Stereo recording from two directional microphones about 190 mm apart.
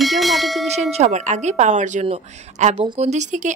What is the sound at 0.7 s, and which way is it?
Speech, 35° right (ahead or behind).